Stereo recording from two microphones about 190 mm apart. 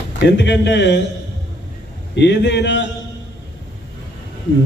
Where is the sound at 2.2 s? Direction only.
65° left (ahead or behind).